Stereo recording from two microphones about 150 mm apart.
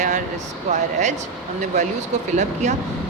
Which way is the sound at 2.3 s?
55° right (ahead or behind).